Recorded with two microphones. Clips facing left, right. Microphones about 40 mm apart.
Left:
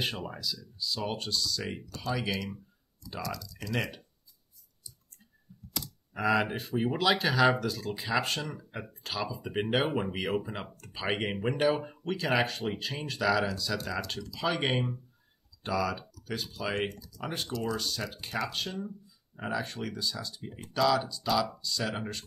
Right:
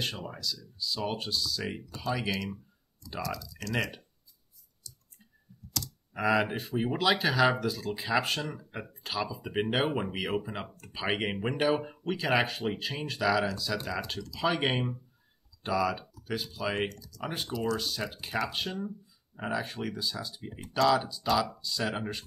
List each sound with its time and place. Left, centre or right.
0.0 s speech: centre
4.9 s clicking: left
6.1 s speech: centre
16.9 s speech: centre
17.2 s speech: centre